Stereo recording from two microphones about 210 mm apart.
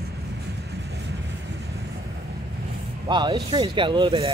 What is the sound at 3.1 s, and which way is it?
Speech, 20° right (ahead or behind).